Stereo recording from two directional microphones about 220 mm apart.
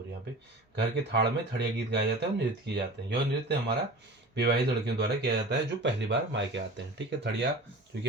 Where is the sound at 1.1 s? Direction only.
50° right (ahead or behind).